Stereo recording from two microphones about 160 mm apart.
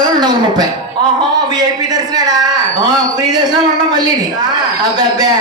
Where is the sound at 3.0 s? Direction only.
25° right (ahead or behind).